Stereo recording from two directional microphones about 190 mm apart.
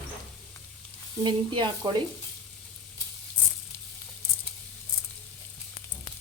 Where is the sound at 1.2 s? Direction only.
25° right (ahead or behind).